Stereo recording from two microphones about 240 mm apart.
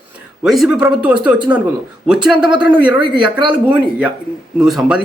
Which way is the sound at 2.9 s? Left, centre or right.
Centre.